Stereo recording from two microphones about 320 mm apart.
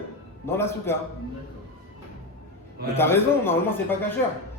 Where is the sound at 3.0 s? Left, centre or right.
Centre.